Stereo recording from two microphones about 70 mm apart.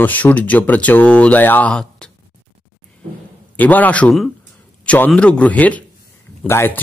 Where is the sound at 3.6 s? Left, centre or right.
Left.